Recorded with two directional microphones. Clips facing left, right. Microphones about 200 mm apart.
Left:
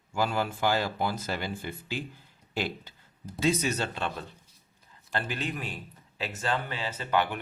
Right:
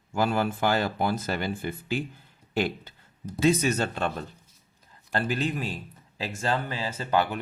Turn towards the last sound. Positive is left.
turn(degrees=-35)  # may be behind; listen again after turning